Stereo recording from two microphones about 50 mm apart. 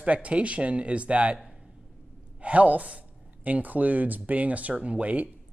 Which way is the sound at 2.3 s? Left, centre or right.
Right.